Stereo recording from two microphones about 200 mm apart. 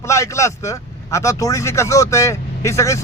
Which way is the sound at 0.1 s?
15° left (ahead or behind).